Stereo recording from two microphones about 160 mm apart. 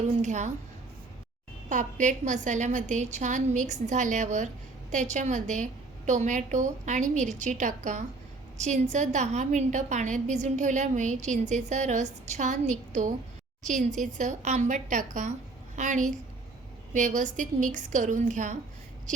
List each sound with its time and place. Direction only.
0.2 s a woman's voice: 45° right (ahead or behind)
1.7 s a woman's voice: 50° right (ahead or behind)